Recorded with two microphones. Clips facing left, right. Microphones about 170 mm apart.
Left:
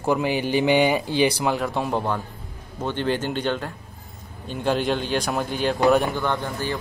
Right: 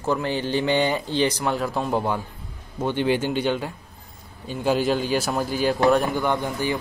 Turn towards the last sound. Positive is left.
turn(degrees=-15)  # may be behind; listen again after turning